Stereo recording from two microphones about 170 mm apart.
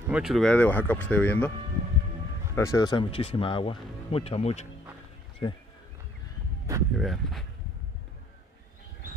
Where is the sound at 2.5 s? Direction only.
20° left (ahead or behind); by 4.7 s 40° left (ahead or behind).